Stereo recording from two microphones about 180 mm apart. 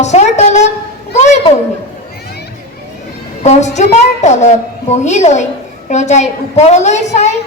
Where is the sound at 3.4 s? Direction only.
40° left (ahead or behind).